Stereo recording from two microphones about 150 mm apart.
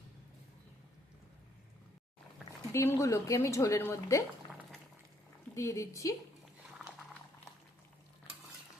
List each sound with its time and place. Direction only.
2.7 s a woman's voice: 20° left (ahead or behind)
5.5 s a woman's voice: 20° left (ahead or behind)